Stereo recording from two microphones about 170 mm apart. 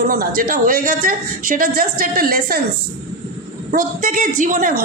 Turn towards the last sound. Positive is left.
turn(degrees=-55)  # may be behind; listen again after turning